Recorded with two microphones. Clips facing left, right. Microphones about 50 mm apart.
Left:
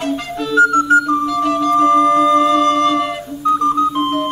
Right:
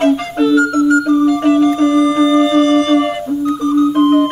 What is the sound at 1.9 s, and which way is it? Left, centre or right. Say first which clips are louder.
Music: even; left.